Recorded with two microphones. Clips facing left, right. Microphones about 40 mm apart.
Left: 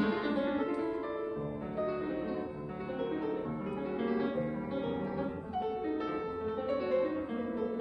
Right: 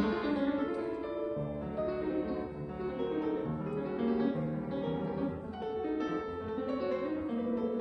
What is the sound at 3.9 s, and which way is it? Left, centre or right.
Music, centre.